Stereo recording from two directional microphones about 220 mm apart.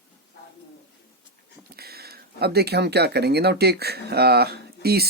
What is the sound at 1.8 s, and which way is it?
Speech, 45° right (ahead or behind).